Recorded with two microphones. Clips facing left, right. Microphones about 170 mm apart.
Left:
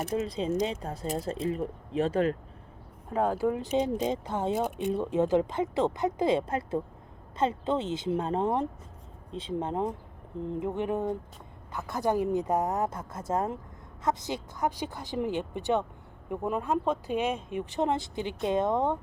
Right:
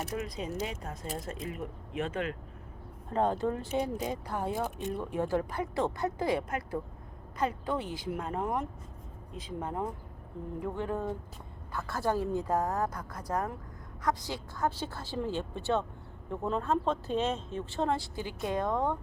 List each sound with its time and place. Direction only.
0.0 s speech: 25° left (ahead or behind)
3.1 s speech: 5° left (ahead or behind)